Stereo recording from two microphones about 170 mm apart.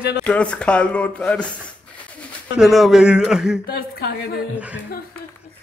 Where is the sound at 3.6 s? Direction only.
60° left (ahead or behind).